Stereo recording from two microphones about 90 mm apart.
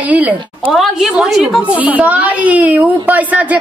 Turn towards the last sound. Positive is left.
turn(degrees=-15)  # may be behind; listen again after turning